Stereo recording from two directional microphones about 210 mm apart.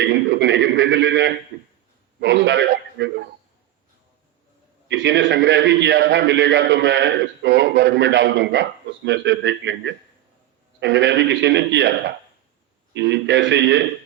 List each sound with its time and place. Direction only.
0.0 s a sound: 55° right (ahead or behind)
2.2 s a man's voice: 55° right (ahead or behind)
4.9 s a man's voice: 55° right (ahead or behind)